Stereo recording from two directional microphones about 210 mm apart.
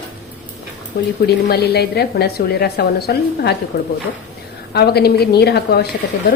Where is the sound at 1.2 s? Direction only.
50° left (ahead or behind).